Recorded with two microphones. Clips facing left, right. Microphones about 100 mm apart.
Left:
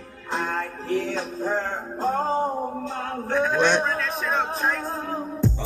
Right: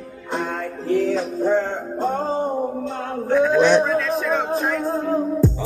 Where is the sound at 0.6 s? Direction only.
Centre (ahead or behind).